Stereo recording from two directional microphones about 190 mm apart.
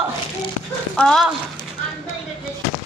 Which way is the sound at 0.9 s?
5° left (ahead or behind).